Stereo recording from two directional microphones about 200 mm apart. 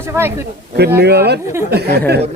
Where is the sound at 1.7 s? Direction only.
55° right (ahead or behind).